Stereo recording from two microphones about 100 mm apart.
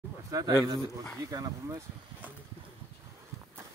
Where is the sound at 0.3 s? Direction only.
35° right (ahead or behind).